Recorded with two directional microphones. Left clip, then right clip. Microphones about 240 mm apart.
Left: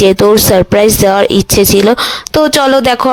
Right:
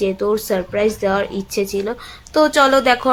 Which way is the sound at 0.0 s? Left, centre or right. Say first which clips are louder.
Left 12 dB; left.